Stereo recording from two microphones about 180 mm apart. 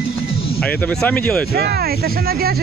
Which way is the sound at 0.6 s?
5° left (ahead or behind).